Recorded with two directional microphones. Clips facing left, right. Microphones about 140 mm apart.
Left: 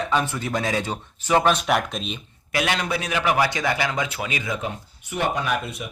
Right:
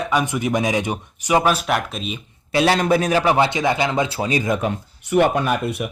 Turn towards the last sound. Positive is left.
turn(degrees=-60)  # may be behind; listen again after turning